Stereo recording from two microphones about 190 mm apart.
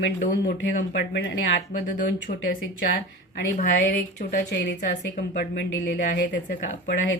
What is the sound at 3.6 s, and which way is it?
Speech, 55° left (ahead or behind).